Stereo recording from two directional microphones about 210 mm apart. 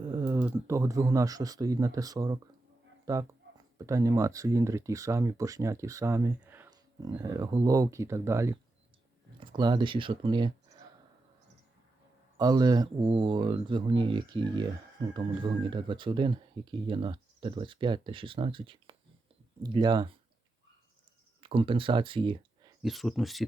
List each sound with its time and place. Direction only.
0.1 s speech: 15° right (ahead or behind)
12.4 s speech: 20° right (ahead or behind)
21.4 s speech: 25° right (ahead or behind)
22.8 s speech: centre (ahead or behind)